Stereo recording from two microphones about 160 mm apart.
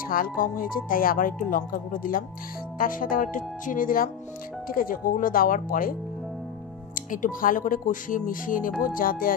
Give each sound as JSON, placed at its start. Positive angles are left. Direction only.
{"t": 0.1, "sound": "speech", "side_deg": 60}
{"t": 7.1, "sound": "speech", "side_deg": 55}